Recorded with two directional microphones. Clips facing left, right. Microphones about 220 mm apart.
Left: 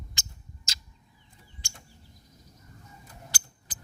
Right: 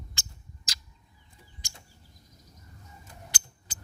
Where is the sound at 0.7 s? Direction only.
25° left (ahead or behind).